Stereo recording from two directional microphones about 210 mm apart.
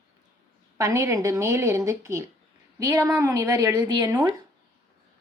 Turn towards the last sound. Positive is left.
turn(degrees=-15)  # may be behind; listen again after turning